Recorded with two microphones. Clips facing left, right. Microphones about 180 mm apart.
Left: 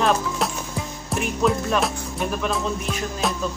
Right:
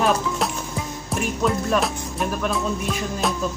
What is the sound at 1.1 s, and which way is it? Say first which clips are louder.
Music: left 1 dB; centre (ahead or behind).